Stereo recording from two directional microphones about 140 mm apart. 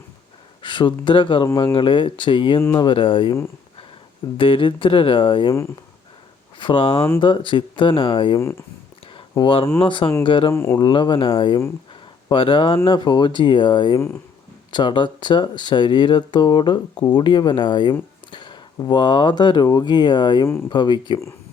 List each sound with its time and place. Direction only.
0.6 s speech: 35° left (ahead or behind)
4.4 s speech: 40° left (ahead or behind)
6.6 s speech: 35° left (ahead or behind)
10.5 s speech: 15° left (ahead or behind)
10.8 s speech: 35° left (ahead or behind)